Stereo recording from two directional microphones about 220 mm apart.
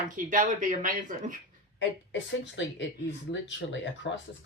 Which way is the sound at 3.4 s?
55° left (ahead or behind).